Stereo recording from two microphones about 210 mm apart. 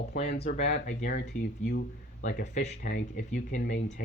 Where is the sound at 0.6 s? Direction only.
55° left (ahead or behind).